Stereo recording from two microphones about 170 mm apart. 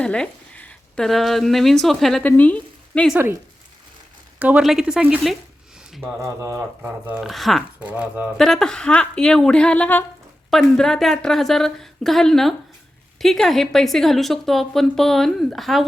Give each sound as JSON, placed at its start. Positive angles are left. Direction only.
{"t": 0.0, "sound": "speech", "side_deg": 5}
{"t": 3.1, "sound": "speech", "side_deg": -10}
{"t": 4.4, "sound": "a woman's voice", "side_deg": -5}
{"t": 6.0, "sound": "speech", "side_deg": -15}
{"t": 7.1, "sound": "speech", "side_deg": 0}
{"t": 8.4, "sound": "a woman's voice", "side_deg": 0}